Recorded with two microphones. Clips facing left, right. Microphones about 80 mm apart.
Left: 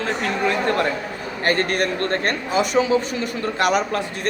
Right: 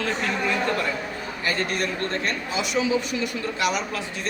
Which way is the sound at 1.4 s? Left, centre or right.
Left.